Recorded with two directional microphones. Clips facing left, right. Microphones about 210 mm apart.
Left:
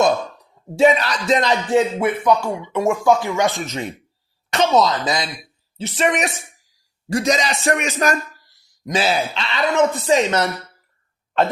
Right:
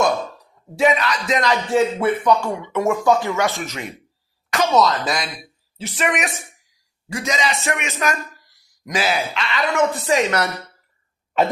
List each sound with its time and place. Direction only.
0.8 s speech: 30° left (ahead or behind)
2.0 s a man's voice: 10° left (ahead or behind)